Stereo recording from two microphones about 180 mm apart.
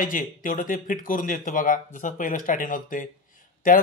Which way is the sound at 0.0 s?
50° left (ahead or behind).